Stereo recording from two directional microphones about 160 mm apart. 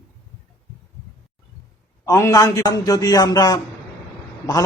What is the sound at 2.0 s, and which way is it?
Speech, 20° left (ahead or behind).